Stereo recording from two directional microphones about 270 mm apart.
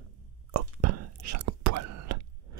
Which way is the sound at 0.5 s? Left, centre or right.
Right.